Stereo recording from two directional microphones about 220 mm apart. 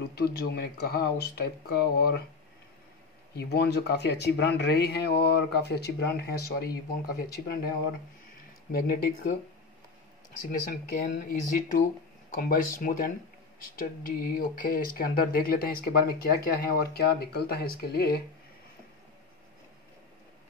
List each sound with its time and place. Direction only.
0.1 s speech: 45° left (ahead or behind)
3.3 s speech: 45° left (ahead or behind)
8.7 s speech: 40° left (ahead or behind)
10.7 s speech: 35° left (ahead or behind)